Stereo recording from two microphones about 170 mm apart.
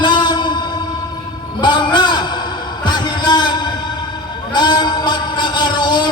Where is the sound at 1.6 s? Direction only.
25° left (ahead or behind).